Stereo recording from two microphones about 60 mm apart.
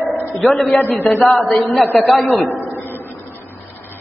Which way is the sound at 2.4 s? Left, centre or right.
Left.